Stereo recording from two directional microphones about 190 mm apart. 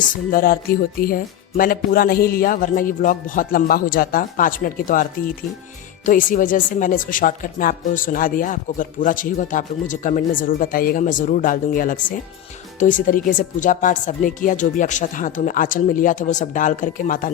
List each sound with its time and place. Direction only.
0.3 s speech: 50° left (ahead or behind)